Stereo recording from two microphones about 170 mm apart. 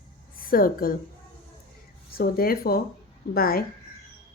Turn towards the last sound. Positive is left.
turn(degrees=60)  # may be behind; listen again after turning